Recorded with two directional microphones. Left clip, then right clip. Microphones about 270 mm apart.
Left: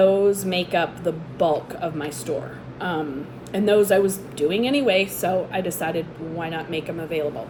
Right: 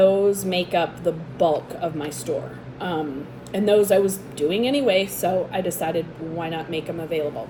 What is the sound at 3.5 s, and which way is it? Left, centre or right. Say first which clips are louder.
Speech: even; left.